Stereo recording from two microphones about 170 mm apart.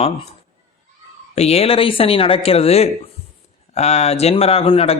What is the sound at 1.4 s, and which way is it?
A man's voice, 35° left (ahead or behind).